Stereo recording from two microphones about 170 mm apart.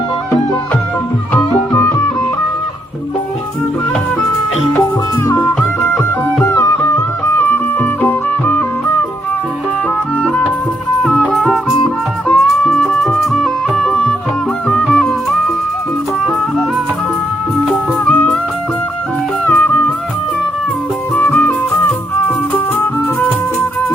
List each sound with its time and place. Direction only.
5.3 s music: 15° left (ahead or behind)
11.0 s music: 5° left (ahead or behind)
17.7 s music: 5° left (ahead or behind)
19.5 s music: 10° left (ahead or behind)
21.2 s music: 10° left (ahead or behind)